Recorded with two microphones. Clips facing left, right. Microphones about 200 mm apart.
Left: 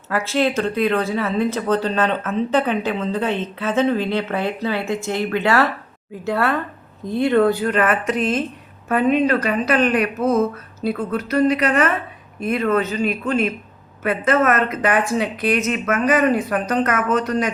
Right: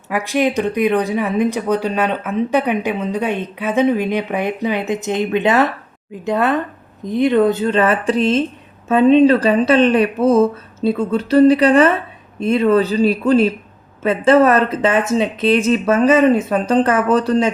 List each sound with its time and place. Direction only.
0.1 s speech: 15° right (ahead or behind); by 17.5 s 30° right (ahead or behind)